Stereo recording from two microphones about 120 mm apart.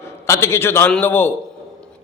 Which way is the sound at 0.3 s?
20° left (ahead or behind).